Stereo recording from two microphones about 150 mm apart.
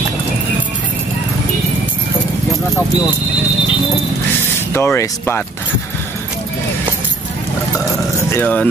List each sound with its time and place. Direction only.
4.7 s speech: 15° left (ahead or behind)
8.3 s speech: 10° left (ahead or behind)